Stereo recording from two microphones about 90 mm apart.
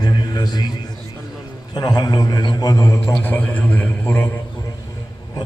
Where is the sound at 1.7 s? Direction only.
45° left (ahead or behind).